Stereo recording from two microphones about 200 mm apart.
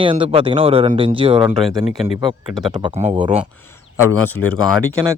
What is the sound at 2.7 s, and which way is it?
Speech, 20° right (ahead or behind).